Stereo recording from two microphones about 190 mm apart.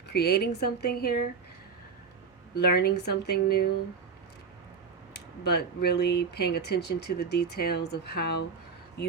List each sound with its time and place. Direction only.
0.1 s speech: 60° left (ahead or behind)
2.6 s speech: 55° left (ahead or behind)
5.1 s speech: 60° left (ahead or behind)